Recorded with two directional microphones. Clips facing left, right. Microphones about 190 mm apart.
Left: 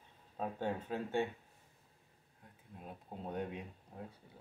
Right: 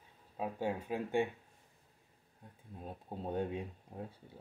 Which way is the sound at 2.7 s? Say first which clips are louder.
Right 4 dB; 30° right (ahead or behind).